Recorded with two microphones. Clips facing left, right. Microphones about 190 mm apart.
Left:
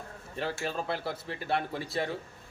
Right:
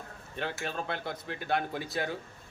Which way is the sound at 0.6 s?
5° left (ahead or behind).